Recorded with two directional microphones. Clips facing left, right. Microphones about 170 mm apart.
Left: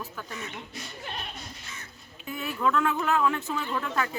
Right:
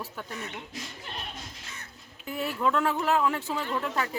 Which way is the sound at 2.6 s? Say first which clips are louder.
Left 1 dB; 25° right (ahead or behind).